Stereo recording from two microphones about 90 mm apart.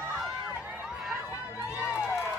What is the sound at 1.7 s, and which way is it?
Run, 10° right (ahead or behind).